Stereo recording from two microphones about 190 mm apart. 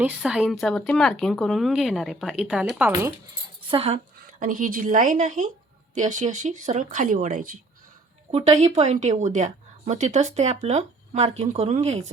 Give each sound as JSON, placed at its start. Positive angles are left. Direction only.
{"t": 0.0, "sound": "speech", "side_deg": -5}
{"t": 3.7, "sound": "a woman's voice", "side_deg": -30}